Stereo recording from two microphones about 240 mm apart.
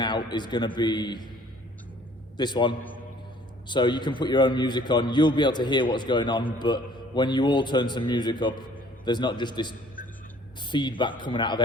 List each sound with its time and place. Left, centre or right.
0.0 s a man's voice: centre
2.4 s a man's voice: centre